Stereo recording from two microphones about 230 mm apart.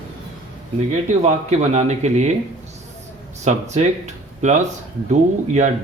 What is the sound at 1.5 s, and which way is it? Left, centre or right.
Speech, right.